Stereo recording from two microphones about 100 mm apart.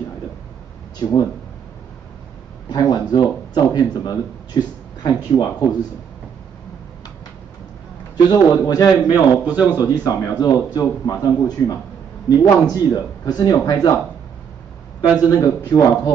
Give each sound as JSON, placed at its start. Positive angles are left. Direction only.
{"t": 1.0, "sound": "speech", "side_deg": 45}
{"t": 2.7, "sound": "speech", "side_deg": 45}
{"t": 8.3, "sound": "speech", "side_deg": 40}
{"t": 9.1, "sound": "a man's voice", "side_deg": -15}
{"t": 9.8, "sound": "speech", "side_deg": 40}
{"t": 15.2, "sound": "speech", "side_deg": 40}